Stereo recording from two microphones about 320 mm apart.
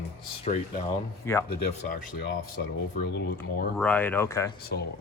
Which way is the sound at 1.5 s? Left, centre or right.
Left.